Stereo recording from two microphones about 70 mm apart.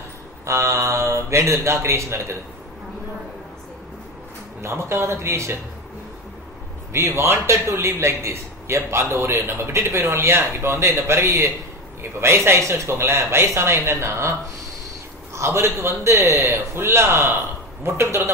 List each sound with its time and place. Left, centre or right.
0.5 s a man's voice: right
4.6 s a man's voice: right
6.9 s a man's voice: right
11.2 s a man's voice: right
12.0 s a man's voice: right
15.3 s a man's voice: right